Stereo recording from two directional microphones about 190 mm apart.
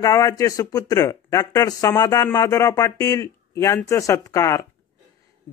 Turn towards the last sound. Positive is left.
turn(degrees=15)  # may be behind; listen again after turning